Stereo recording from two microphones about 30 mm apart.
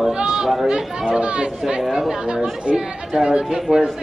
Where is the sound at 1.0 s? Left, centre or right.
Right.